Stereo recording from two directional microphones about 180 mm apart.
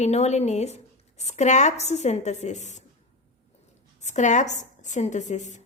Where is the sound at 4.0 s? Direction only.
40° left (ahead or behind).